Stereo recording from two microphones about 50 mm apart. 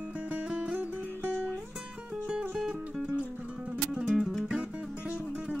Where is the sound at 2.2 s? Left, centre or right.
Centre.